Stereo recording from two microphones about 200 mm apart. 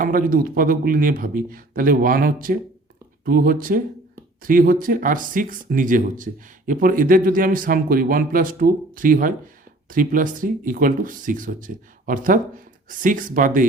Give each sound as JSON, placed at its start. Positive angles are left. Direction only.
{"t": 0.0, "sound": "speech", "side_deg": -45}